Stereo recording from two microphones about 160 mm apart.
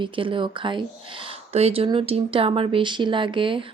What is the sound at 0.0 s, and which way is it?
Speech, 30° right (ahead or behind).